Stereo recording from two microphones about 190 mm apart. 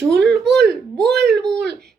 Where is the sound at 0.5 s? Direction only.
60° right (ahead or behind).